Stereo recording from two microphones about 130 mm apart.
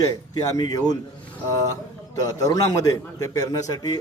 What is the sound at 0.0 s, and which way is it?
Speech, 30° left (ahead or behind).